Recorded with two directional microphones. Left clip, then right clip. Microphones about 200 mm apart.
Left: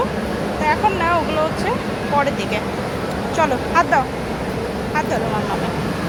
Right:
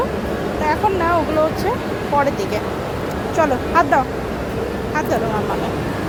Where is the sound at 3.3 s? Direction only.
20° right (ahead or behind).